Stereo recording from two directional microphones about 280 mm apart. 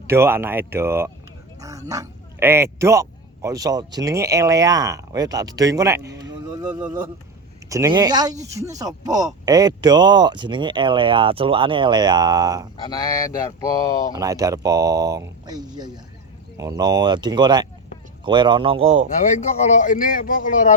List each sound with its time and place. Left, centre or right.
0.1 s speech: centre
6.1 s music: centre
7.7 s speech: centre
12.7 s speech: centre
14.2 s speech: centre
19.0 s speech: left